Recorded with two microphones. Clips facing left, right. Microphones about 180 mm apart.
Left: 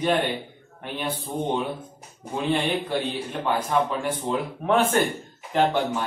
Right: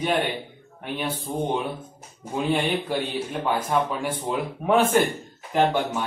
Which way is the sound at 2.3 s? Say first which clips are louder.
Right 1 dB; 5° right (ahead or behind).